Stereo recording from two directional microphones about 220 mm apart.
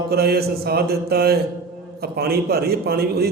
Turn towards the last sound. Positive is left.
turn(degrees=-45)  # may be behind; listen again after turning